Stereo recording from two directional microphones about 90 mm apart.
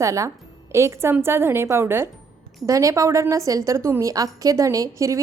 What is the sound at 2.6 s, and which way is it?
A woman's voice, 35° right (ahead or behind).